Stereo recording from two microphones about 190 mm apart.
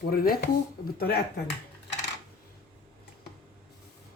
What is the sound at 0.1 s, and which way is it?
Speech, 50° left (ahead or behind).